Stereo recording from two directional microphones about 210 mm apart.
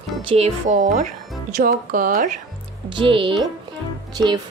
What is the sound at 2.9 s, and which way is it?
Speech, 25° right (ahead or behind).